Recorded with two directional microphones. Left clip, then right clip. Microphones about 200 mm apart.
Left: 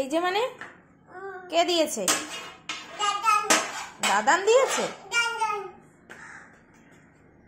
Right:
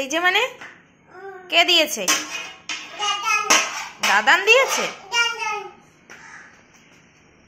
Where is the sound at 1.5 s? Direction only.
5° left (ahead or behind).